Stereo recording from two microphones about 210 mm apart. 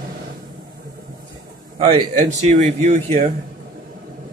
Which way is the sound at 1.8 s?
30° right (ahead or behind).